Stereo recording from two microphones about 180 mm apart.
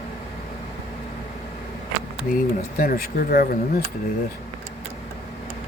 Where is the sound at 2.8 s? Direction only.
55° left (ahead or behind).